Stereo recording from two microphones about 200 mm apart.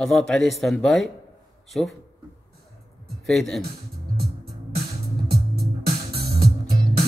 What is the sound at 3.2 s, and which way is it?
Speech, centre (ahead or behind).